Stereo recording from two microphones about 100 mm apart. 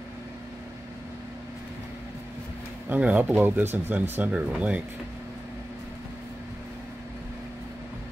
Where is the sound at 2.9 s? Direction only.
15° right (ahead or behind).